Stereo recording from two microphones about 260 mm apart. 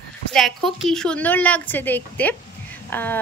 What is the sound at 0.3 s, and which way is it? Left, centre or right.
Speech, centre.